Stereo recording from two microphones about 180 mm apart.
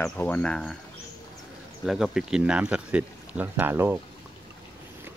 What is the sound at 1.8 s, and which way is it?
Speech, centre (ahead or behind).